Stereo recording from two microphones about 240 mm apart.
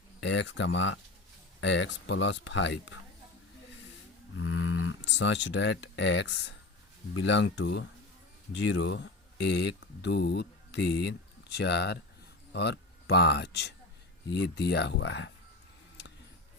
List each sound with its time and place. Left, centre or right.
0.2 s speech: left
4.4 s speech: left